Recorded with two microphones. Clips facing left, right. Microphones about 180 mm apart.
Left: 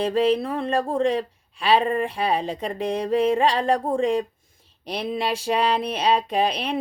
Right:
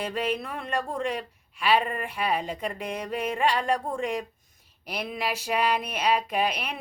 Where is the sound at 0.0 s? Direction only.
30° left (ahead or behind).